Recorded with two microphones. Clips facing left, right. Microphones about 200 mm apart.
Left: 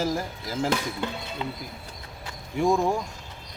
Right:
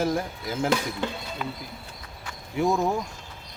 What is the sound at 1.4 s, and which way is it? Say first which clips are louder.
Speech: left 1 dB; 25° left (ahead or behind).